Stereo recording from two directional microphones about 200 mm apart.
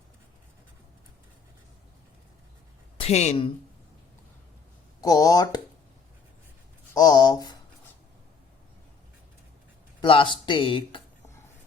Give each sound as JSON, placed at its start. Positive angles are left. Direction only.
{"t": 3.0, "sound": "a woman's voice", "side_deg": 35}
{"t": 4.9, "sound": "speech", "side_deg": 20}
{"t": 6.9, "sound": "speech", "side_deg": 20}
{"t": 10.0, "sound": "speech", "side_deg": 25}